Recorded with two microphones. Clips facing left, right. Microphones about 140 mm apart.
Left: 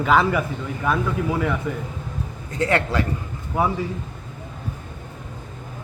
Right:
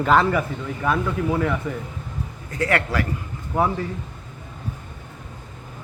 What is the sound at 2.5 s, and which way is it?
Speech, 25° left (ahead or behind).